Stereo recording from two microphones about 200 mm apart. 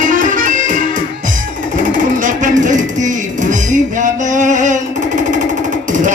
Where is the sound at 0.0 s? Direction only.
40° right (ahead or behind).